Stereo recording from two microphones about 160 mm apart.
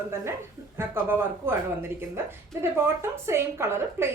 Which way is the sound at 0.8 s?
15° right (ahead or behind).